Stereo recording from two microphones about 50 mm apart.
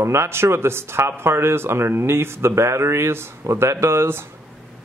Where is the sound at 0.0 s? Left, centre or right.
Right.